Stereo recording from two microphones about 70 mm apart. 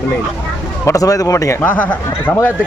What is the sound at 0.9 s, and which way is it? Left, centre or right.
Speech, left.